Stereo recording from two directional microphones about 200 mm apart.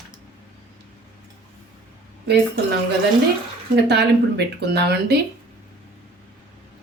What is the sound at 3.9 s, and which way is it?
Speech, 55° right (ahead or behind).